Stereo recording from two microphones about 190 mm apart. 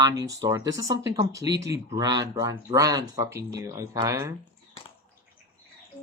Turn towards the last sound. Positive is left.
turn(degrees=-15)  # may be behind; listen again after turning